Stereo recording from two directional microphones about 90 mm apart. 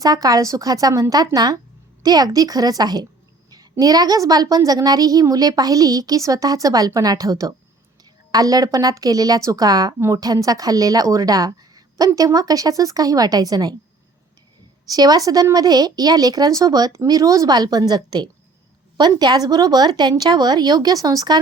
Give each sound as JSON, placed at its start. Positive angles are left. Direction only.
{"t": 0.0, "sound": "a woman's voice", "side_deg": -45}
{"t": 14.9, "sound": "a woman's voice", "side_deg": -45}